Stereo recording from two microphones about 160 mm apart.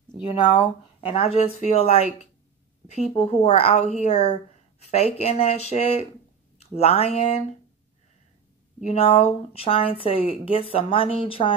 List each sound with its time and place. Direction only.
0.2 s a woman's voice: 35° left (ahead or behind)
8.8 s a woman's voice: 40° left (ahead or behind)